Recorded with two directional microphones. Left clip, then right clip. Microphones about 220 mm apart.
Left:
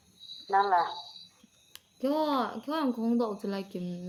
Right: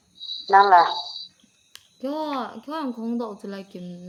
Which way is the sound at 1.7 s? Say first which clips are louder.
Even; centre (ahead or behind).